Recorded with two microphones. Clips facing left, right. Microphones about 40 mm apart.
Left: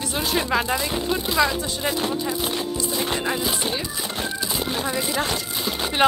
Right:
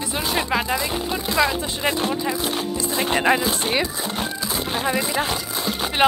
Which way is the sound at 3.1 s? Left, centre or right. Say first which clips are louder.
Right 7 dB; right.